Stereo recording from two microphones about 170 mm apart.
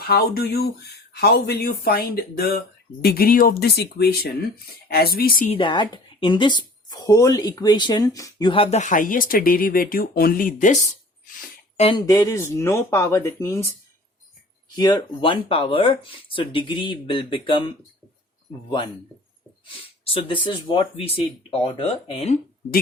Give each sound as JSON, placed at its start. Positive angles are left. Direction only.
{"t": 0.1, "sound": "speech", "side_deg": 65}
{"t": 5.5, "sound": "speech", "side_deg": 30}
{"t": 11.8, "sound": "speech", "side_deg": 30}
{"t": 12.0, "sound": "speech", "side_deg": 15}
{"t": 14.8, "sound": "speech", "side_deg": 25}
{"t": 20.1, "sound": "speech", "side_deg": 30}